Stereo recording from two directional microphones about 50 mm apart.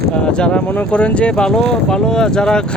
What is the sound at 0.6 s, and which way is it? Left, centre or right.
Speech, left.